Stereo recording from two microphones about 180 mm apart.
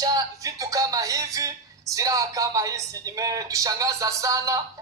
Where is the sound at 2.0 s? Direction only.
20° right (ahead or behind).